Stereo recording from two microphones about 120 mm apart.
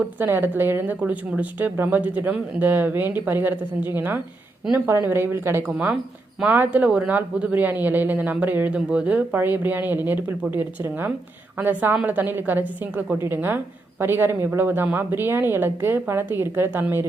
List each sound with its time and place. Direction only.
0.2 s speech: 15° right (ahead or behind)